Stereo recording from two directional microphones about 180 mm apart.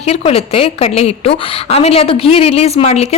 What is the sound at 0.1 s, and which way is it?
Speech, 35° left (ahead or behind).